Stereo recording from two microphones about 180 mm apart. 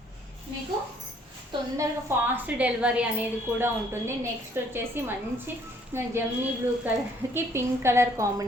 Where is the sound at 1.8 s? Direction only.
10° right (ahead or behind).